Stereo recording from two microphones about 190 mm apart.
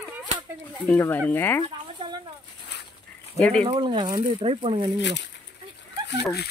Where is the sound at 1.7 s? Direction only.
25° right (ahead or behind).